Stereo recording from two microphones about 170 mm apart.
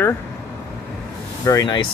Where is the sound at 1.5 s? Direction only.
20° left (ahead or behind).